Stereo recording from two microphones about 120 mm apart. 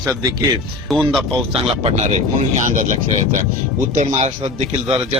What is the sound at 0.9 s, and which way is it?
Speech, centre (ahead or behind).